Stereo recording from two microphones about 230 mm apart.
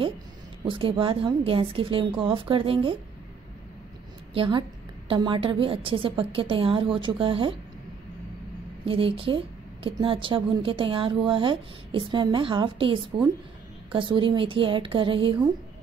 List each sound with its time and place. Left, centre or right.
0.7 s a woman's voice: right
4.3 s a woman's voice: right
8.8 s a woman's voice: right